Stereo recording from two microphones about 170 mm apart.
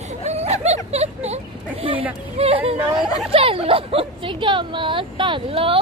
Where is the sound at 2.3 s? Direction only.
35° right (ahead or behind).